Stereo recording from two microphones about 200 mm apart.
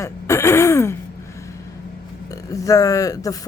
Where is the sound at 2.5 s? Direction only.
15° left (ahead or behind).